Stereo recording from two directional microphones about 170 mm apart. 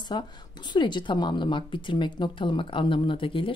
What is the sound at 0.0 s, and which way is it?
A woman's voice, 25° left (ahead or behind).